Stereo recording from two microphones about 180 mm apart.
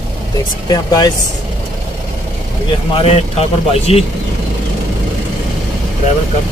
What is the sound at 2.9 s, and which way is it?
A man's voice, 35° left (ahead or behind).